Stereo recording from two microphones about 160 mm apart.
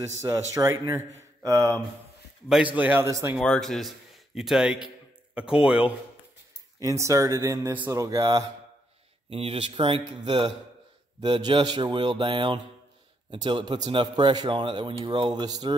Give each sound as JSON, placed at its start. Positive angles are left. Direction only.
{"t": 0.2, "sound": "a man's voice", "side_deg": -20}
{"t": 2.5, "sound": "a man's voice", "side_deg": -10}
{"t": 3.3, "sound": "a man's voice", "side_deg": 5}
{"t": 6.8, "sound": "a man's voice", "side_deg": -20}
{"t": 9.3, "sound": "a man's voice", "side_deg": -35}